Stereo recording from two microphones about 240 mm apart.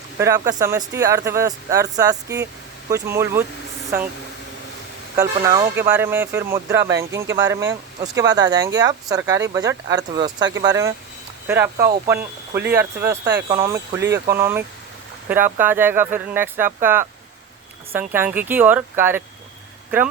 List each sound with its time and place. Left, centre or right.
0.2 s speech: centre
5.1 s speech: centre
18.1 s speech: centre